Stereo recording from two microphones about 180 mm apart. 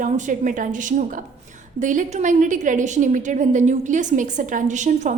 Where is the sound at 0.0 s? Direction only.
45° right (ahead or behind).